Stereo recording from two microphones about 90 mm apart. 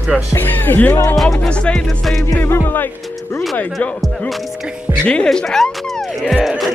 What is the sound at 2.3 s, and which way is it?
Music, 25° left (ahead or behind).